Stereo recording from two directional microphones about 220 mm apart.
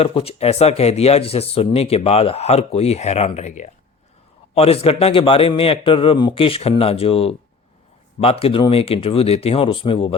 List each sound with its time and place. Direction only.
0.0 s speech: 25° left (ahead or behind)